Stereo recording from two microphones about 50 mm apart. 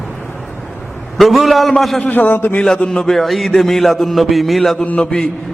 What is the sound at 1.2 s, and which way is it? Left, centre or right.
Speech, centre.